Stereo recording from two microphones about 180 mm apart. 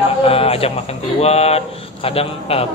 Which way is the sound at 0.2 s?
35° left (ahead or behind).